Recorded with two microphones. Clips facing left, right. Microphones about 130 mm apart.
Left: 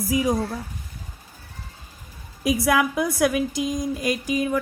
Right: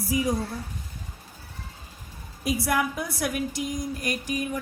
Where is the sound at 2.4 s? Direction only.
90° left.